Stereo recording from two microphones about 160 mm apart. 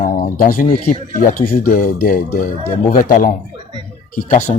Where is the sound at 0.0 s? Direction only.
65° left (ahead or behind).